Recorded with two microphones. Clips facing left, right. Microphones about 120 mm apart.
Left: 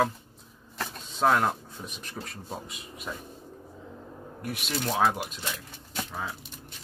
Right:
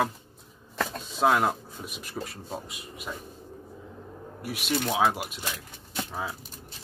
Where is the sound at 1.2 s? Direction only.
10° right (ahead or behind).